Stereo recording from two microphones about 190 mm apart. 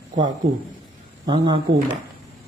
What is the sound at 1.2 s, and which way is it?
Speech, 25° right (ahead or behind).